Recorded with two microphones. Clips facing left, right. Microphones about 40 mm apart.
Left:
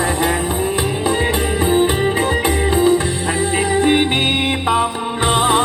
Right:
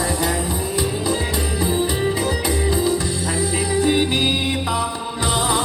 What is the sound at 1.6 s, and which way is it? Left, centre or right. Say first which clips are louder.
Music: left 5 dB; left.